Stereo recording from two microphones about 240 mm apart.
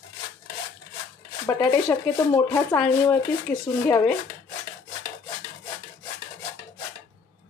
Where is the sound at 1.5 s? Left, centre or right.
Centre.